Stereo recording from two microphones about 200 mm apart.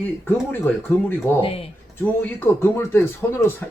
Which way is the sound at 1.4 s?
30° left (ahead or behind).